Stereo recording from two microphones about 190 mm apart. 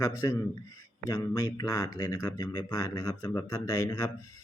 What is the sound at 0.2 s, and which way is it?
A man's voice, 20° left (ahead or behind).